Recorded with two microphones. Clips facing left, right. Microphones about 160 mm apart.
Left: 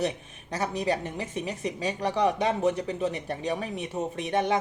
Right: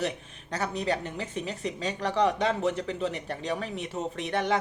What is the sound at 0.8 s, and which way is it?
Speech, 15° left (ahead or behind).